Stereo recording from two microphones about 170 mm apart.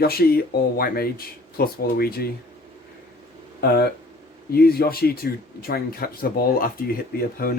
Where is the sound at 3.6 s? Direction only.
65° left (ahead or behind).